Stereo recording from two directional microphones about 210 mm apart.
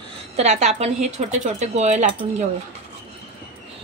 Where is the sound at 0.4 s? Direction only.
30° right (ahead or behind).